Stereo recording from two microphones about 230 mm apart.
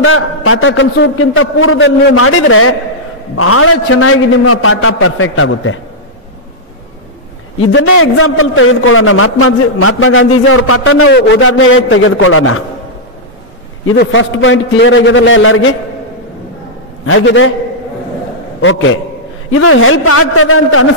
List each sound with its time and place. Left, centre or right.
0.0 s a man's voice: left
2.1 s a man's voice: left
7.7 s a man's voice: left
13.9 s a man's voice: left
17.0 s a man's voice: left
18.6 s a man's voice: left